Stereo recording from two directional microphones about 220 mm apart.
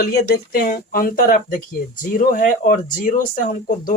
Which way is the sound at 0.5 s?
40° left (ahead or behind).